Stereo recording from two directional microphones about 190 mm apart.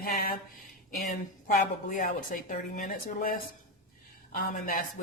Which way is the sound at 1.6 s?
45° left (ahead or behind).